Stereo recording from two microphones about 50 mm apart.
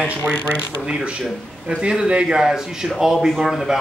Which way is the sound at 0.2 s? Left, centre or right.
Left.